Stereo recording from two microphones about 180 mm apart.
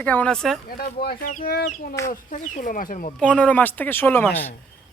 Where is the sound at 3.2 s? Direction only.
5° left (ahead or behind).